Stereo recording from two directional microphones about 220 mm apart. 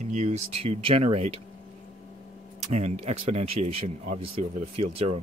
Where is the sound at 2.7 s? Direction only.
30° right (ahead or behind).